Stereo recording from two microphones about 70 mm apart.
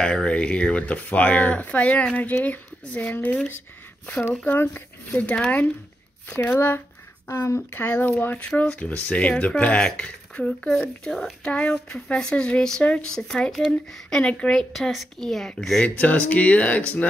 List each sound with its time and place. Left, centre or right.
0.0 s speech: centre; by 6.8 s left
7.2 s speech: left
8.4 s speech: centre
15.8 s speech: centre